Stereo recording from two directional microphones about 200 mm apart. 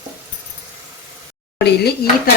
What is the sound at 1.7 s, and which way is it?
Dishes, 55° left (ahead or behind).